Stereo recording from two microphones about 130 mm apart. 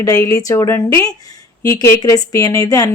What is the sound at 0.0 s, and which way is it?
Speech, 25° left (ahead or behind).